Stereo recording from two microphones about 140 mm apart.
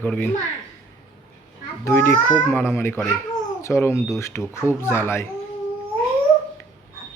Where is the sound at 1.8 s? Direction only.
15° left (ahead or behind).